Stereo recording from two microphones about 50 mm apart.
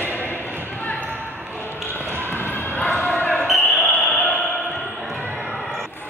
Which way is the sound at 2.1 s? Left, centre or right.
Right.